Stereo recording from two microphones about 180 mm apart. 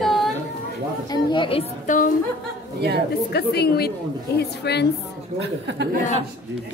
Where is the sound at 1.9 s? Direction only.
45° left (ahead or behind).